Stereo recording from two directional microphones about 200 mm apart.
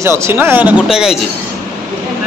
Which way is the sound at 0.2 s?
10° right (ahead or behind).